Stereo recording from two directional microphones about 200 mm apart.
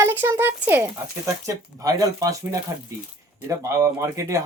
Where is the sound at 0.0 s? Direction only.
10° right (ahead or behind).